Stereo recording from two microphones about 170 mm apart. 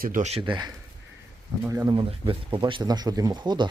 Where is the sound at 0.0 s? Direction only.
50° right (ahead or behind); by 0.7 s 30° right (ahead or behind).